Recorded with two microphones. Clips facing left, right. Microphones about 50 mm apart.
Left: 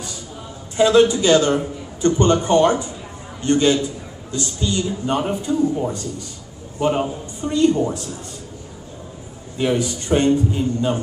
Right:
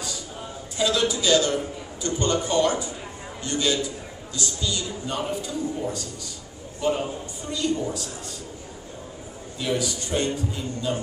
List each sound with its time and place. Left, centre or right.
0.7 s a man's voice: left
9.6 s a man's voice: left